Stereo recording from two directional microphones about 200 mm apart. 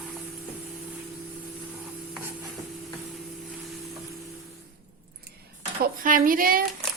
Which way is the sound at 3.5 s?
Centre (ahead or behind).